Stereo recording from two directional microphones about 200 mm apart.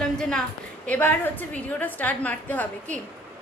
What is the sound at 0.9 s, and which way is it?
A woman's voice, 10° left (ahead or behind).